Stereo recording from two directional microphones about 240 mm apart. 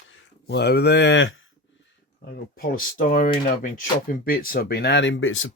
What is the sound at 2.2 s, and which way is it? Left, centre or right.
Speech, left.